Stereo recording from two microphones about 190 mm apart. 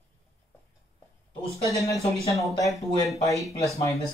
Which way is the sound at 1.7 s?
15° left (ahead or behind).